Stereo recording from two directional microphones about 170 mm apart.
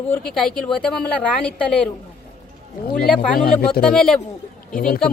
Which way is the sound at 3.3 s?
60° left (ahead or behind).